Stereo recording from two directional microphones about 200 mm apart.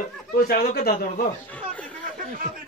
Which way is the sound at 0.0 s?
50° left (ahead or behind).